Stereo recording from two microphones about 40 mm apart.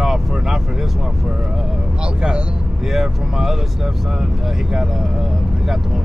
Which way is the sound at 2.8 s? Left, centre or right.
Centre.